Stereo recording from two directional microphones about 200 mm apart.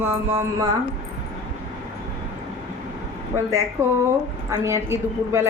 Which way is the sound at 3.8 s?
15° right (ahead or behind).